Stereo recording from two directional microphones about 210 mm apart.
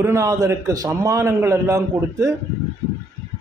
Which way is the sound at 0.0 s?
15° right (ahead or behind).